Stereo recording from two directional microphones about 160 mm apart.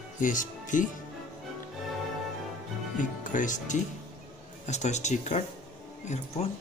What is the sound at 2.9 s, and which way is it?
Speech, 55° left (ahead or behind).